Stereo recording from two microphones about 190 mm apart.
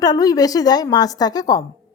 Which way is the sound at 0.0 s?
20° left (ahead or behind).